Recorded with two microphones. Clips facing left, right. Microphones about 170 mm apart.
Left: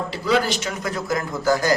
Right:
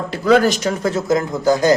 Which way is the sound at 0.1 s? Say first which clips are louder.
Right 9 dB; 50° right (ahead or behind).